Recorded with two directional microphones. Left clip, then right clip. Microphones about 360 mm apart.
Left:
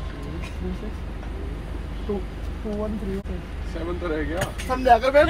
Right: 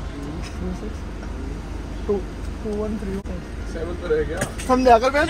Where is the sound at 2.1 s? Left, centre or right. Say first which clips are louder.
Right 6 dB; centre.